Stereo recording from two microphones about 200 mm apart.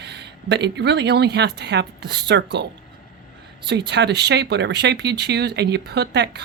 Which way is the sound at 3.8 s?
60° right (ahead or behind).